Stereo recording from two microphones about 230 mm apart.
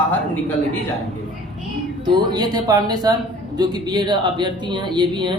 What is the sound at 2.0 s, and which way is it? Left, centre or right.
A woman's voice, centre.